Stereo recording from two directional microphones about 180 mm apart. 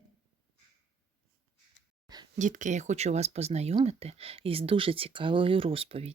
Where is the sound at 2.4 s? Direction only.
45° right (ahead or behind).